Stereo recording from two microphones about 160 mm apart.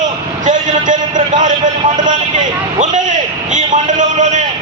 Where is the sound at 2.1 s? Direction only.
50° right (ahead or behind).